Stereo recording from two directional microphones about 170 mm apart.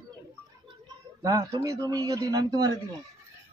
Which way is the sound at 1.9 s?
20° right (ahead or behind).